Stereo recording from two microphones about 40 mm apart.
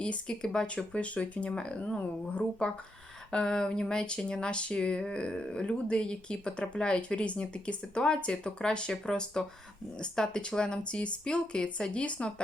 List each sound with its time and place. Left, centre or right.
0.0 s speech: left
0.7 s speech: left
1.5 s speech: left